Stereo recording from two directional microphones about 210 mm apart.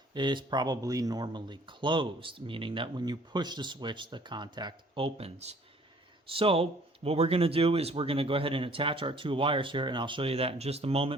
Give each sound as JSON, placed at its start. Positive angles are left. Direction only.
{"t": 0.1, "sound": "speech", "side_deg": -20}